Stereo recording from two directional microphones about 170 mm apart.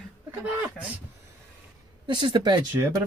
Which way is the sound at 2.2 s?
30° right (ahead or behind).